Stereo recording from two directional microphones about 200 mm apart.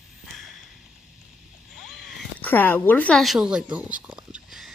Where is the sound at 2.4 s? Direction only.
10° left (ahead or behind).